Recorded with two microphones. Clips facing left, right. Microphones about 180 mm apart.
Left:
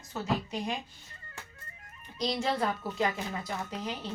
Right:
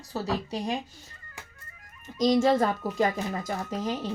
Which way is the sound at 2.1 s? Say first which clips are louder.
Right 9 dB; 45° right (ahead or behind).